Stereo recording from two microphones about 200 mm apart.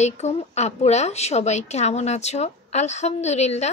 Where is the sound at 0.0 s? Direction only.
30° left (ahead or behind).